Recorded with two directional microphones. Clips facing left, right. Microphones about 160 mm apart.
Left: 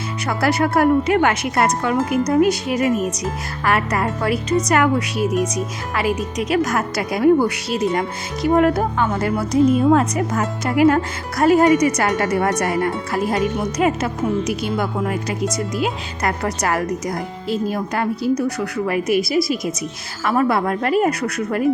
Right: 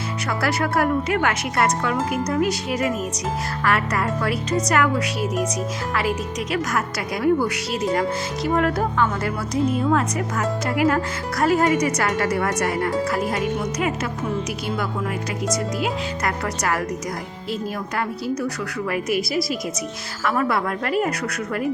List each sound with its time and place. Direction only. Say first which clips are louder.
0.3 s a woman's voice: left 5 dB; 25° left (ahead or behind)